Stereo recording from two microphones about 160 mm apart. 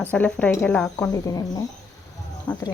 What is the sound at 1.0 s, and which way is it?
Speech, 20° left (ahead or behind).